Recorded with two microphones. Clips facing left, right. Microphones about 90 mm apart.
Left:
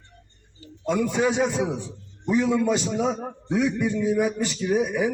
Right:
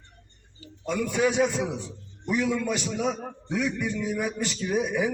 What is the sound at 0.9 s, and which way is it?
A man's voice, 20° left (ahead or behind).